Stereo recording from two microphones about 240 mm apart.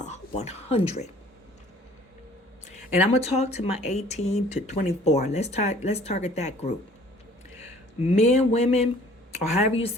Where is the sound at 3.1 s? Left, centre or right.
Left.